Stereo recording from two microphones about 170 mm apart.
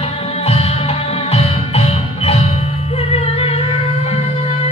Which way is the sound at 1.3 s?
35° left (ahead or behind).